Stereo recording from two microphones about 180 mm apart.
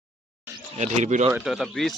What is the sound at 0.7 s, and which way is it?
Speech, 40° right (ahead or behind).